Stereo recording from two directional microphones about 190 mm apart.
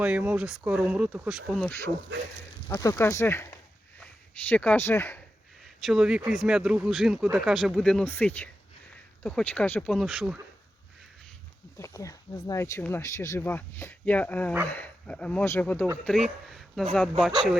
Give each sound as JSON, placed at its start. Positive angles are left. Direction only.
{"t": 0.0, "sound": "speech", "side_deg": -5}
{"t": 2.6, "sound": "speech", "side_deg": 15}
{"t": 5.6, "sound": "speech", "side_deg": 0}
{"t": 11.8, "sound": "speech", "side_deg": 15}